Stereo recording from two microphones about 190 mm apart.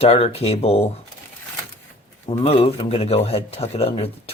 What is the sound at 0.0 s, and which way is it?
Speech, 30° left (ahead or behind).